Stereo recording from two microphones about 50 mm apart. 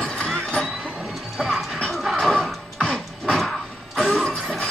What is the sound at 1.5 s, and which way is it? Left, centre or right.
Music, centre.